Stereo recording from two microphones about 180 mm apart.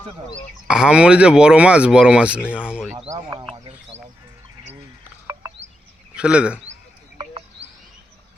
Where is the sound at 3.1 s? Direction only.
25° right (ahead or behind).